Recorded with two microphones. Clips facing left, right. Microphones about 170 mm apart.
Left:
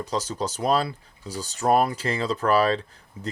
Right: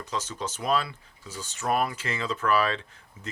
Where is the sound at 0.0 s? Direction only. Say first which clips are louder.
Left 5 dB; 35° left (ahead or behind).